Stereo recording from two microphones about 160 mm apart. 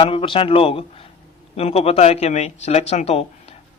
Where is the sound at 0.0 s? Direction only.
35° left (ahead or behind).